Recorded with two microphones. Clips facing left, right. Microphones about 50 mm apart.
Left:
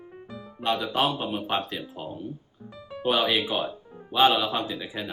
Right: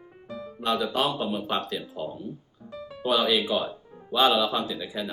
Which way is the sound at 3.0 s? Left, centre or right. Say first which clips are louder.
Even; left.